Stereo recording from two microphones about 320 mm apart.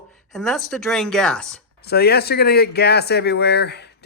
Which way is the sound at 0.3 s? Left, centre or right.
Centre.